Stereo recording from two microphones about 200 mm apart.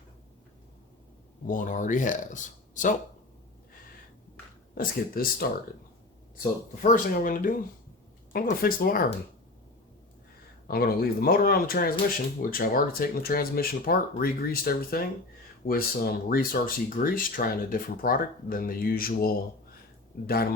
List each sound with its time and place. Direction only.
1.5 s speech: 40° left (ahead or behind)
4.7 s speech: 45° left (ahead or behind)
6.8 s speech: 40° left (ahead or behind)
10.7 s speech: 50° left (ahead or behind)